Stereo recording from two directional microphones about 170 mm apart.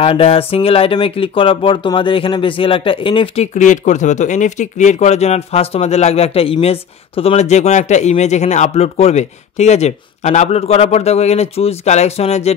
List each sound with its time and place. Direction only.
0.0 s speech: 35° left (ahead or behind)
3.5 s speech: 45° left (ahead or behind)